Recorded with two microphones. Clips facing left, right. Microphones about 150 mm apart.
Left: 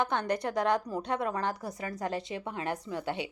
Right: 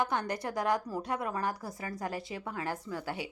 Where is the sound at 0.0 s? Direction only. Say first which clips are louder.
Left 2 dB; 20° left (ahead or behind).